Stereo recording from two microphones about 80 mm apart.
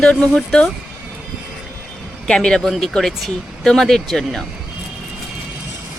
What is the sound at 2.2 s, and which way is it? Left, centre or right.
Speech, centre.